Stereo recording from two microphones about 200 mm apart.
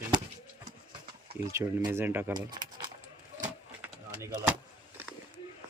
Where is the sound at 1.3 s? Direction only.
10° right (ahead or behind).